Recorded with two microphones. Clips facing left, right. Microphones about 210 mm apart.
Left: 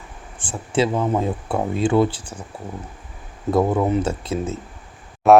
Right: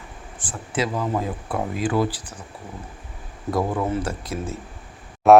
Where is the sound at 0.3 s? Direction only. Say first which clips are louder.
Left 5 dB; 30° left (ahead or behind).